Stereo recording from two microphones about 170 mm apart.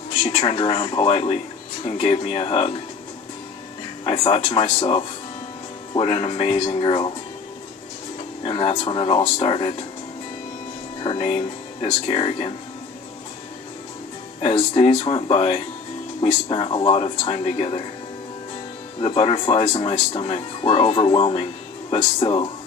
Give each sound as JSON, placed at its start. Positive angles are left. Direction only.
{"t": 0.2, "sound": "speech", "side_deg": 35}
{"t": 4.0, "sound": "speech", "side_deg": 35}
{"t": 8.4, "sound": "speech", "side_deg": 30}
{"t": 11.0, "sound": "speech", "side_deg": 35}
{"t": 14.4, "sound": "speech", "side_deg": 35}
{"t": 18.9, "sound": "speech", "side_deg": 30}